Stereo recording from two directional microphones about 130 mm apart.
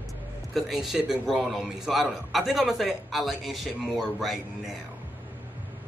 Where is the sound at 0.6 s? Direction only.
Centre (ahead or behind).